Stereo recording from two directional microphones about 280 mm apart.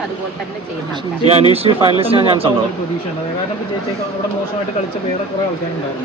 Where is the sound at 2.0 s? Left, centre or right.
Centre.